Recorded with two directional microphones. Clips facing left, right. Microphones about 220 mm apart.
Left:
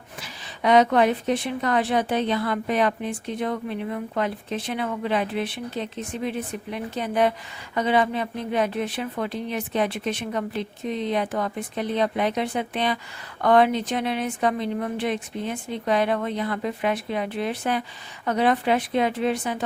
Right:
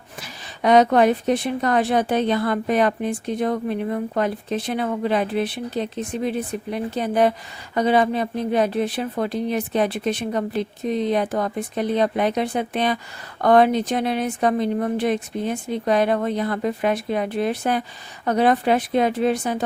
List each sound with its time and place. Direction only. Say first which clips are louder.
0.2 s a woman's voice: right 3 dB; 45° right (ahead or behind)